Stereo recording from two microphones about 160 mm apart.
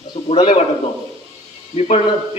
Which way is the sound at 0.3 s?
35° left (ahead or behind).